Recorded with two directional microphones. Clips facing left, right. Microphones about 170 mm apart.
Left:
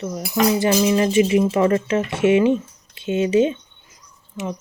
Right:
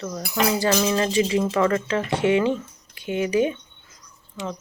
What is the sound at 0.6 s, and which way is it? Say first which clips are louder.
Speech: left 4 dB; 20° left (ahead or behind).